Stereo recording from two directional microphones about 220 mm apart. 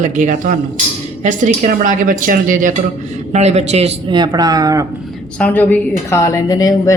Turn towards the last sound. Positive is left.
turn(degrees=15)  # may be behind; listen again after turning